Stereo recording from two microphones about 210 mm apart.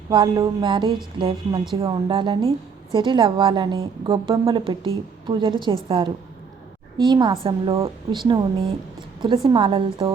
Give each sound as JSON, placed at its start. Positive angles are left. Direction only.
{"t": 0.1, "sound": "a woman's voice", "side_deg": -20}